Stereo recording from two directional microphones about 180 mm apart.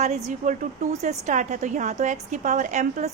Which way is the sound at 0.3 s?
45° right (ahead or behind).